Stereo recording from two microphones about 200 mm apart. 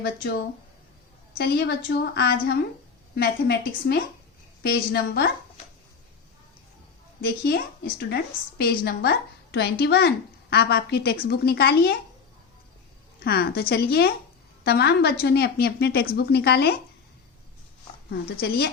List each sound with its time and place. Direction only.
1.5 s a woman's voice: 50° left (ahead or behind)
7.4 s a woman's voice: 50° left (ahead or behind)
13.1 s a woman's voice: 50° left (ahead or behind)
18.3 s a woman's voice: 50° left (ahead or behind)